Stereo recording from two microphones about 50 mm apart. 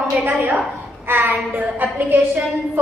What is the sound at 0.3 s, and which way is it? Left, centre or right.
A woman's voice, right.